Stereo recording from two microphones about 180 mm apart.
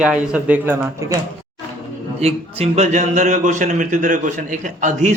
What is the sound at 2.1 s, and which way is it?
A man's voice, 35° right (ahead or behind).